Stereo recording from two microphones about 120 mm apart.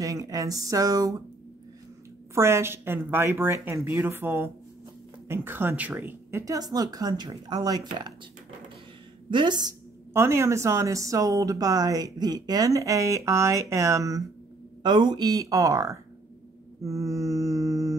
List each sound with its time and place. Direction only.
0.0 s speech: 25° right (ahead or behind)
2.3 s a woman's voice: 20° right (ahead or behind)
9.3 s a woman's voice: 40° right (ahead or behind)
10.1 s speech: 20° right (ahead or behind)
14.8 s a woman's voice: 40° right (ahead or behind)